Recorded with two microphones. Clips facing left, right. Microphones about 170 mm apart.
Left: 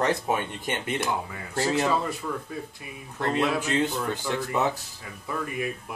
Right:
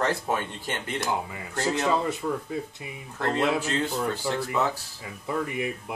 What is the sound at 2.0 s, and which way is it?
Speech, 20° right (ahead or behind).